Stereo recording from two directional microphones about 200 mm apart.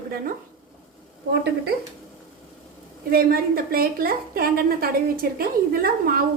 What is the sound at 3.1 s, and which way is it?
A woman's voice, 50° right (ahead or behind).